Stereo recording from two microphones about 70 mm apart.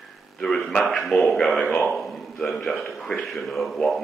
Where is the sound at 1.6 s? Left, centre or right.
Centre.